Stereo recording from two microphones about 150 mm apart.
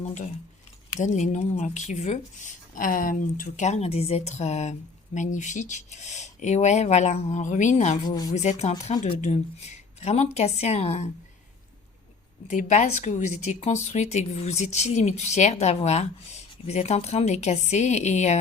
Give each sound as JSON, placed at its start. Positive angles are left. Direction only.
{"t": 0.0, "sound": "speech", "side_deg": 55}
{"t": 8.0, "sound": "speech", "side_deg": 25}
{"t": 8.3, "sound": "speech", "side_deg": 50}
{"t": 12.5, "sound": "speech", "side_deg": 55}